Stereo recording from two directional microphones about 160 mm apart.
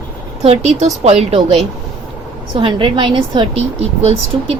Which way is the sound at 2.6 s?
30° right (ahead or behind).